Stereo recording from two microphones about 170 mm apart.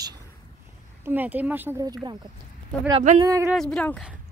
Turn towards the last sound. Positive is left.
turn(degrees=5)  # may be behind; listen again after turning